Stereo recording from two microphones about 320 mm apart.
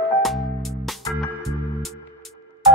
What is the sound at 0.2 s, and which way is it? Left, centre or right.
Music, centre.